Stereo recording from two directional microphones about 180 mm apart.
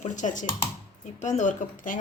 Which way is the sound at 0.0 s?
45° left (ahead or behind).